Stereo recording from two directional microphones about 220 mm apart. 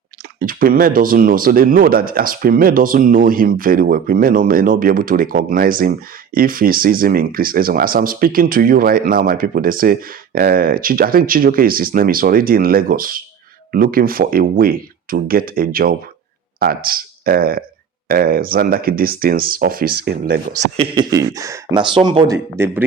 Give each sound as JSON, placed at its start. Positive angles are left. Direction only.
{"t": 0.3, "sound": "speech", "side_deg": -40}
{"t": 20.7, "sound": "speech", "side_deg": -25}